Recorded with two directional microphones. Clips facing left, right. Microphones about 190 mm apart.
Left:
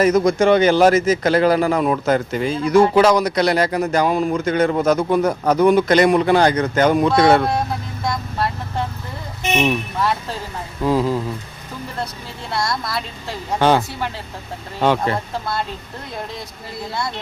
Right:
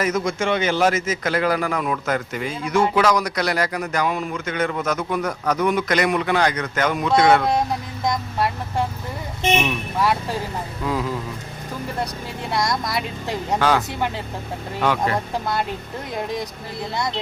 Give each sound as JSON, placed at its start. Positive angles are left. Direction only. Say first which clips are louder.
{"t": 0.0, "sound": "speech", "louder": "left 8 dB", "side_deg": 35}
{"t": 8.0, "sound": "vehicle", "louder": "even", "side_deg": -15}
{"t": 10.0, "sound": "speech", "louder": "right 5 dB", "side_deg": -10}
{"t": 10.8, "sound": "speech", "louder": "left 7 dB", "side_deg": 30}
{"t": 12.5, "sound": "speech", "louder": "even", "side_deg": -15}
{"t": 13.6, "sound": "speech", "louder": "left 5 dB", "side_deg": 25}